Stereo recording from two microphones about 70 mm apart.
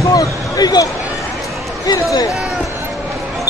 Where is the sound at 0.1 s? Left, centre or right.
Left.